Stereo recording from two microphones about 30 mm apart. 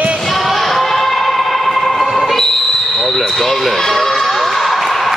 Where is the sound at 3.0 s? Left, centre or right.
Centre.